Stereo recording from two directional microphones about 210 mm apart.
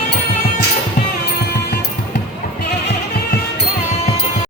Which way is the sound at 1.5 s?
50° left (ahead or behind).